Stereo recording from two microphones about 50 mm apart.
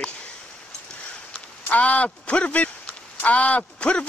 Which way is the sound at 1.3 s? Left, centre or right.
Left.